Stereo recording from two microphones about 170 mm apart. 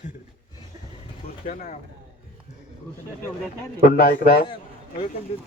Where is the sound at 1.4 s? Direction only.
50° left (ahead or behind).